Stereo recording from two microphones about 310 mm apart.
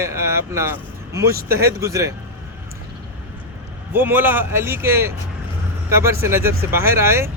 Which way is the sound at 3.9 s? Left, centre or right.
Centre.